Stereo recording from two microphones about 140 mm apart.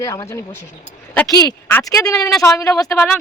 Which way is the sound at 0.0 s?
20° left (ahead or behind).